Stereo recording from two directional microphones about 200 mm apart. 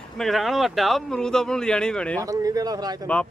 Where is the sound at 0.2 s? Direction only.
Centre (ahead or behind).